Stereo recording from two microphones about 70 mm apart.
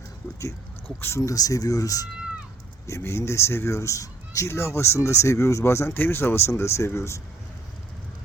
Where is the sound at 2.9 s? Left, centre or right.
Left.